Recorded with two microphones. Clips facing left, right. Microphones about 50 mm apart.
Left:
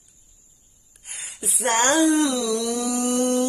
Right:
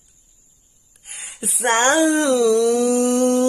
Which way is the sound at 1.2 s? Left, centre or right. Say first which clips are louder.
Right 4 dB; right.